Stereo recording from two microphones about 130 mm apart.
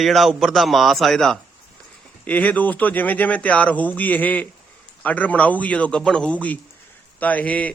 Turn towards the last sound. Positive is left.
turn(degrees=10)  # may be behind; listen again after turning